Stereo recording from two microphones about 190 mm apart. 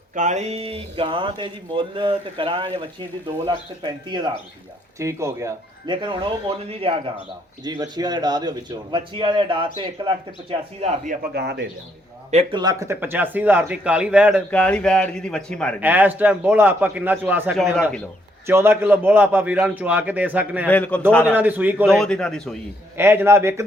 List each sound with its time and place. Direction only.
0.1 s speech: 40° right (ahead or behind)
10.8 s speech: 45° right (ahead or behind)
11.3 s a man's voice: 60° right (ahead or behind)
12.3 s a man's voice: 35° right (ahead or behind)
12.5 s a man's voice: 20° right (ahead or behind)
14.5 s a man's voice: 5° left (ahead or behind)
15.8 s a man's voice: 10° right (ahead or behind)
20.7 s a man's voice: 5° left (ahead or behind)
21.2 s a man's voice: 10° right (ahead or behind)
21.9 s a man's voice: 5° left (ahead or behind)
23.0 s a man's voice: 15° right (ahead or behind)